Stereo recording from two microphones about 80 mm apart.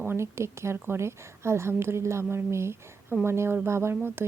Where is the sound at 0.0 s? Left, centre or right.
Right.